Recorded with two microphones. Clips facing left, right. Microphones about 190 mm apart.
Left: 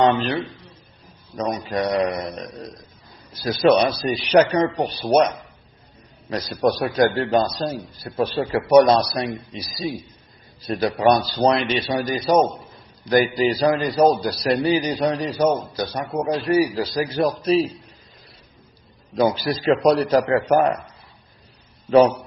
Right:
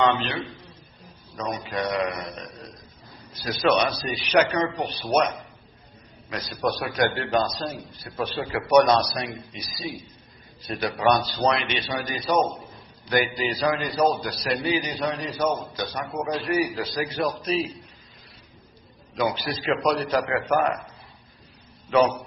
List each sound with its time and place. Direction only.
0.0 s a man's voice: 40° left (ahead or behind)
1.4 s a man's voice: 35° left (ahead or behind)
6.3 s a man's voice: 35° left (ahead or behind)
10.8 s a man's voice: 30° left (ahead or behind)
19.1 s a man's voice: 40° left (ahead or behind)
21.8 s a man's voice: 35° left (ahead or behind)